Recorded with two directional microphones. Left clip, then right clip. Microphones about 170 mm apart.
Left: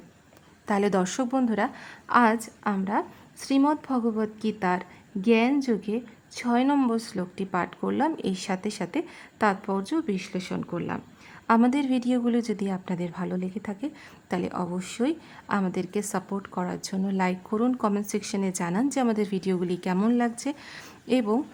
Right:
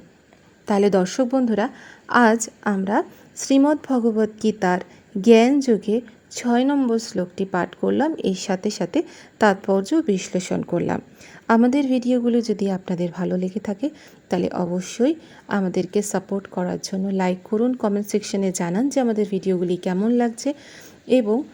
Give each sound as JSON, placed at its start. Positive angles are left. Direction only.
{"t": 0.6, "sound": "a woman's voice", "side_deg": -10}